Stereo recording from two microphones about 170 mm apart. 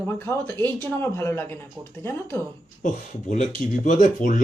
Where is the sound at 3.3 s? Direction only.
45° left (ahead or behind).